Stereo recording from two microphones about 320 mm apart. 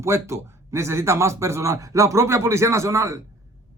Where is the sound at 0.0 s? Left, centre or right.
Centre.